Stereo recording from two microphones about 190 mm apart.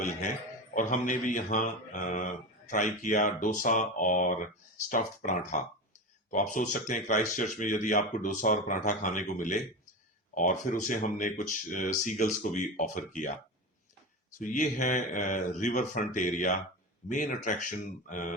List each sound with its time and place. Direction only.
0.7 s speech: 45° left (ahead or behind)
14.3 s speech: 45° left (ahead or behind)